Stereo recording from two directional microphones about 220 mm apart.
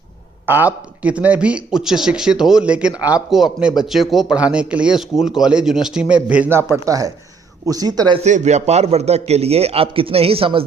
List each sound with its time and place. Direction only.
0.4 s speech: 10° right (ahead or behind)
8.2 s a man's voice: 30° right (ahead or behind)